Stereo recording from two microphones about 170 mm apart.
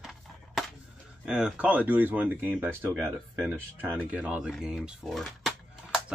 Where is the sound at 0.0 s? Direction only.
Centre (ahead or behind).